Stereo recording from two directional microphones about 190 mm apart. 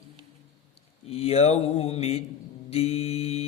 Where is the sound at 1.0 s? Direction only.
30° left (ahead or behind).